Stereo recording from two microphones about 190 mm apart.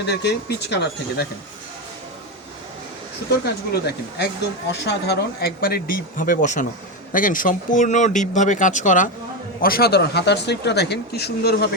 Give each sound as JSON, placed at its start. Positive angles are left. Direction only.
{"t": 0.0, "sound": "speech", "side_deg": 60}
{"t": 3.7, "sound": "speech", "side_deg": 60}
{"t": 9.6, "sound": "speech", "side_deg": 50}